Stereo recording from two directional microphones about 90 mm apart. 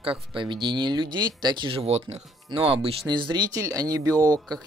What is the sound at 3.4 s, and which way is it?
Speech, 40° right (ahead or behind).